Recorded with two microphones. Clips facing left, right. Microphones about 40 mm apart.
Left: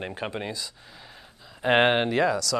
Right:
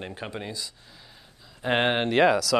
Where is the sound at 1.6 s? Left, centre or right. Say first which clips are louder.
Left 4 dB; centre.